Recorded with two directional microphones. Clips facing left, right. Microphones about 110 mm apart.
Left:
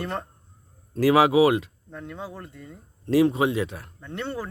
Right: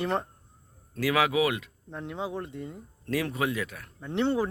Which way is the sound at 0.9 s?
35° left (ahead or behind).